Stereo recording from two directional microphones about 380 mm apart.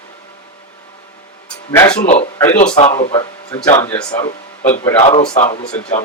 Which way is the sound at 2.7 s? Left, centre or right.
Centre.